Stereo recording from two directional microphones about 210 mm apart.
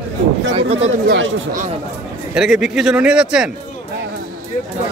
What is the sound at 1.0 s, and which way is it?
Speech, 60° right (ahead or behind).